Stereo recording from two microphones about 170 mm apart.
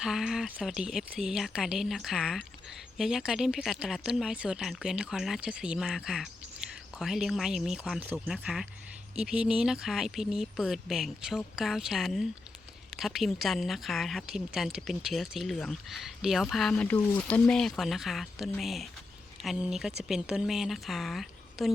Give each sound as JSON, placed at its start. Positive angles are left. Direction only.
{"t": 0.0, "sound": "speech", "side_deg": -5}